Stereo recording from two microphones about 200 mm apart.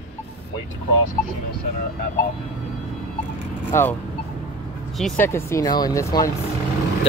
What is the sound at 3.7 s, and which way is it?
Speech, 15° left (ahead or behind).